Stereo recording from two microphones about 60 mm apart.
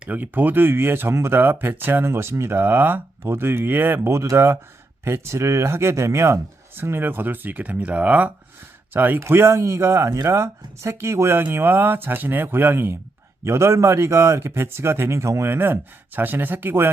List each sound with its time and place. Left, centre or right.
0.0 s speech: right
4.1 s speech: right
6.7 s speech: right
9.3 s speech: right
13.4 s speech: right
15.5 s speech: right